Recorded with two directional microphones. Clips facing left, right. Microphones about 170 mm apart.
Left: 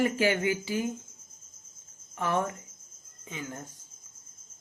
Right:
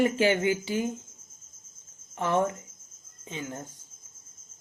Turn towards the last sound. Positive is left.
turn(degrees=-25)  # may be behind; listen again after turning